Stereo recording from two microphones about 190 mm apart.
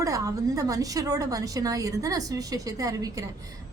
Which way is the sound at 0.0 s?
15° right (ahead or behind).